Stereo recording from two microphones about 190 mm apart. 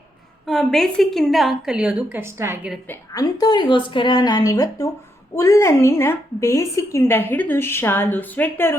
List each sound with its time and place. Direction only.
0.4 s a woman's voice: centre (ahead or behind)
2.8 s a woman's voice: 15° left (ahead or behind)